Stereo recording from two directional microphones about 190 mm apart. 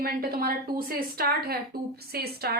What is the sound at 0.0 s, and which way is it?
A woman's voice, 50° right (ahead or behind).